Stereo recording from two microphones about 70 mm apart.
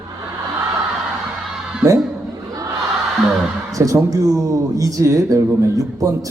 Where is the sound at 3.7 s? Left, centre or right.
Right.